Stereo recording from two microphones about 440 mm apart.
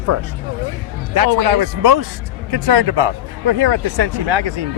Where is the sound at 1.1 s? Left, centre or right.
Right.